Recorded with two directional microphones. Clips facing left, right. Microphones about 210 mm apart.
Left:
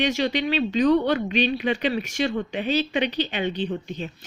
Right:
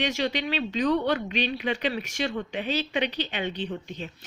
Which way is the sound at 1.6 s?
25° left (ahead or behind).